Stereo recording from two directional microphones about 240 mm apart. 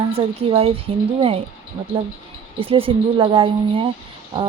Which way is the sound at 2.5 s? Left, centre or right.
Right.